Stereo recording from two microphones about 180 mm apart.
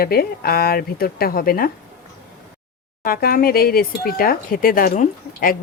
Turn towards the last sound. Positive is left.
turn(degrees=50)  # may be behind; listen again after turning